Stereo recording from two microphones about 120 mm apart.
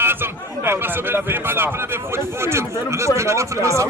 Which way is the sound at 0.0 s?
20° right (ahead or behind).